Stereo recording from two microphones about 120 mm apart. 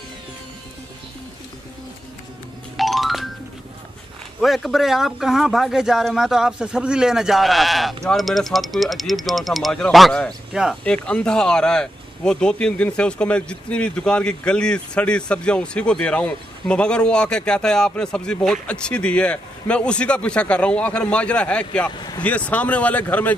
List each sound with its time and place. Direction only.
2.8 s music: centre (ahead or behind)
4.4 s a man's voice: centre (ahead or behind)
10.8 s speech: 10° left (ahead or behind)
21.9 s speech: 35° left (ahead or behind)
22.2 s speech: 10° left (ahead or behind)